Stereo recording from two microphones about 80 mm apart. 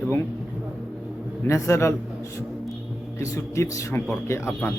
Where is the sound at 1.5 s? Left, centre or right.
Left.